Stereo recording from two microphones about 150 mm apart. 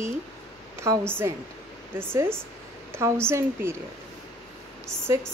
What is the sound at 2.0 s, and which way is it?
Speech, 15° right (ahead or behind).